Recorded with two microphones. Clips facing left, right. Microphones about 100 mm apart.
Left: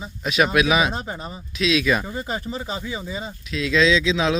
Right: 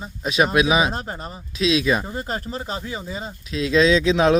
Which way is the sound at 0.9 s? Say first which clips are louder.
Even; 5° left (ahead or behind).